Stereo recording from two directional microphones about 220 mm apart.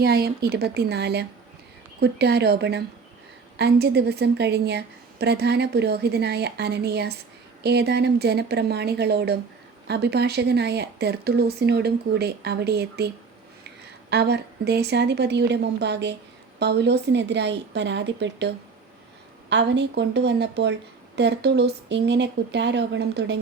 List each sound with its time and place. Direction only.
0.0 s speech: 45° right (ahead or behind)
14.1 s speech: 50° right (ahead or behind)